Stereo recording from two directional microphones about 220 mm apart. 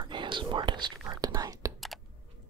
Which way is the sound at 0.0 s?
20° right (ahead or behind).